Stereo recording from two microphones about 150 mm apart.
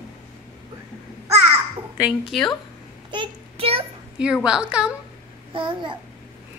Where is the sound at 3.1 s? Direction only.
35° right (ahead or behind).